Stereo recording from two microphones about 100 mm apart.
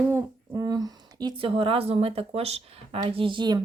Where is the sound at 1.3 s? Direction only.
60° right (ahead or behind).